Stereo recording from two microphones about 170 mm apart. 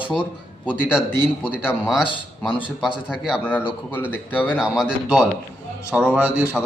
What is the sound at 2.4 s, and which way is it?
Speech, 30° left (ahead or behind).